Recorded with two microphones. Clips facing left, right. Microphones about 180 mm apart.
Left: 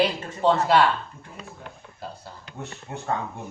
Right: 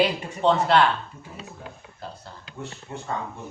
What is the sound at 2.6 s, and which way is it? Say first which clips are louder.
Speech: even; 60° left (ahead or behind).